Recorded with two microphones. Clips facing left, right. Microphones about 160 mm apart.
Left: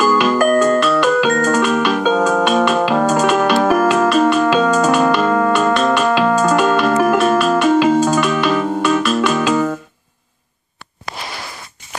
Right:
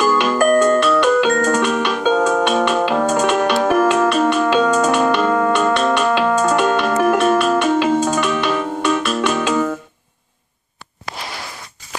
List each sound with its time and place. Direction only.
0.0 s music: 40° left (ahead or behind)